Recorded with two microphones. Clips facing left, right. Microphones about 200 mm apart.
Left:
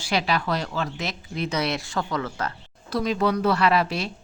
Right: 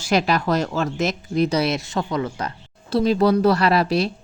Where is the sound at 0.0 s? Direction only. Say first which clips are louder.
Right 5 dB; 45° right (ahead or behind).